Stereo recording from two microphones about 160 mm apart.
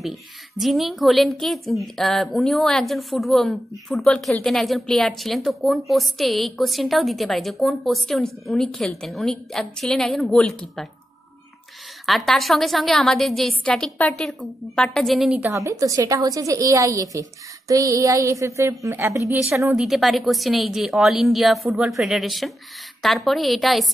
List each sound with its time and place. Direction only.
0.0 s a woman's voice: centre (ahead or behind)
12.1 s a woman's voice: centre (ahead or behind)
15.5 s a woman's voice: 20° right (ahead or behind)
19.8 s a woman's voice: centre (ahead or behind)